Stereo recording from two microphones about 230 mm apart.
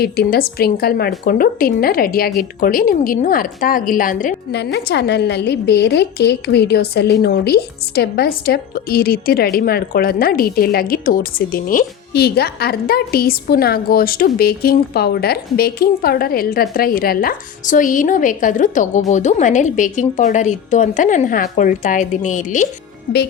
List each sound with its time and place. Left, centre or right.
0.0 s a woman's voice: left